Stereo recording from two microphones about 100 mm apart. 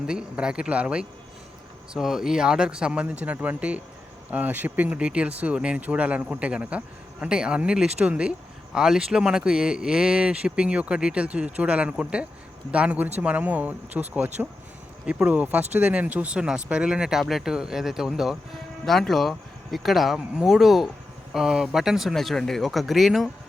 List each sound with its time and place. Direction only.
0.0 s speech: 10° right (ahead or behind)